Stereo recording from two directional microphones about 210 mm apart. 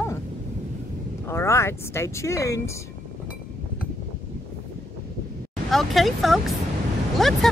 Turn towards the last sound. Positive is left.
turn(degrees=0)  # may be behind; listen again after turning